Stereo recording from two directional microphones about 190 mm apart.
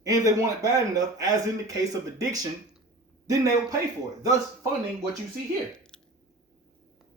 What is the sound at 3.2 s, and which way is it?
A man's voice, 20° right (ahead or behind).